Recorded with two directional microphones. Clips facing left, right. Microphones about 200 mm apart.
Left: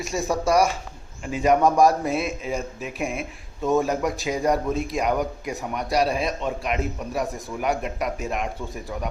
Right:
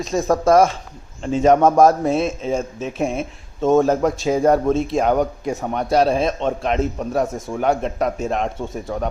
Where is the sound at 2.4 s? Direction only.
35° right (ahead or behind).